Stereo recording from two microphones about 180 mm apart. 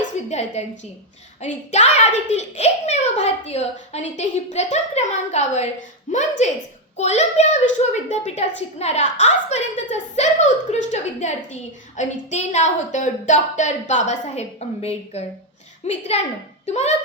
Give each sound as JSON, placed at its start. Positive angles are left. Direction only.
{"t": 0.3, "sound": "a woman's voice", "side_deg": 40}